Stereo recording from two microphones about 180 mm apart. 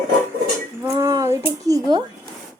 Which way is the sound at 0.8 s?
20° right (ahead or behind).